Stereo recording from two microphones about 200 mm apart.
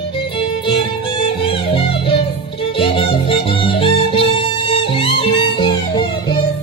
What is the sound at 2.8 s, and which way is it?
Music, 25° left (ahead or behind).